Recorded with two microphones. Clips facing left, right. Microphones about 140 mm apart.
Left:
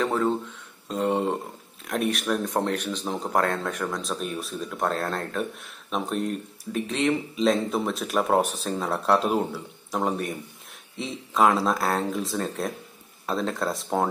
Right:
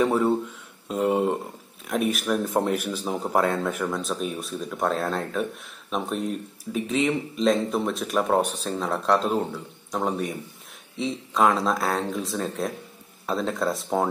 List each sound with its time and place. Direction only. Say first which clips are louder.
0.0 s speech: right 3 dB; 10° right (ahead or behind)